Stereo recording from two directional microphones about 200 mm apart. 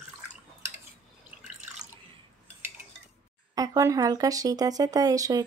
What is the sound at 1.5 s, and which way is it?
Drip, 35° right (ahead or behind).